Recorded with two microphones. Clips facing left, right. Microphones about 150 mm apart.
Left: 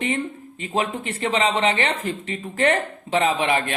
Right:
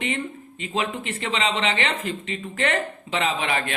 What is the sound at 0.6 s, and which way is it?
Speech, 40° left (ahead or behind).